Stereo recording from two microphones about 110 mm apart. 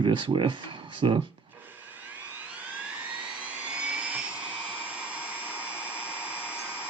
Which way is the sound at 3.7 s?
10° right (ahead or behind).